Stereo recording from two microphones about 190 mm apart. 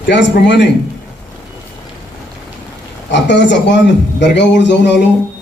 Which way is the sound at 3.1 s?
70° left (ahead or behind).